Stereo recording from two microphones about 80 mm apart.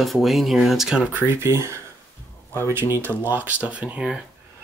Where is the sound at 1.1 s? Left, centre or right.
Right; by 4.2 s centre.